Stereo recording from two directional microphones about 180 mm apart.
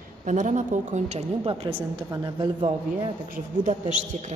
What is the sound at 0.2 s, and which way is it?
A woman's voice, 45° right (ahead or behind).